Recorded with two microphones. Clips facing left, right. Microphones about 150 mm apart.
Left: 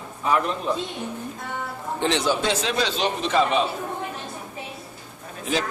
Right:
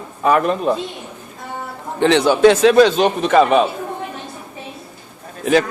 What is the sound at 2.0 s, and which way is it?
A man's voice, 65° right (ahead or behind).